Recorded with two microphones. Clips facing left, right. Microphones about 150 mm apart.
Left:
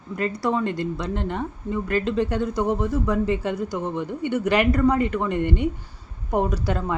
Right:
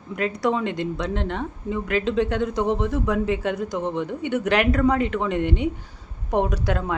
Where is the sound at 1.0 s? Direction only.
5° left (ahead or behind).